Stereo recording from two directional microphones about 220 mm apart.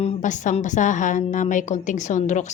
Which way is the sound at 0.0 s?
30° left (ahead or behind).